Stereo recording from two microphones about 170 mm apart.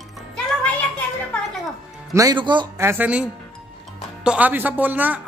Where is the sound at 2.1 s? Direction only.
20° right (ahead or behind).